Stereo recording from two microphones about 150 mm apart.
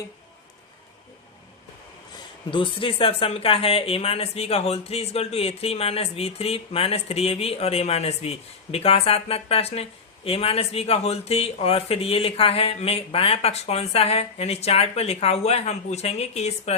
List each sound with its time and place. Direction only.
2.5 s speech: 35° left (ahead or behind)